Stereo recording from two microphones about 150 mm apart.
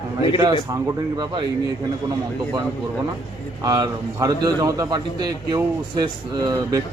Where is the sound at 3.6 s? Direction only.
25° right (ahead or behind).